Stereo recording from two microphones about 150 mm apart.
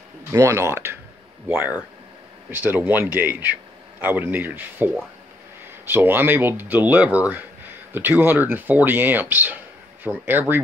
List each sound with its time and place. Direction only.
0.3 s speech: 20° right (ahead or behind)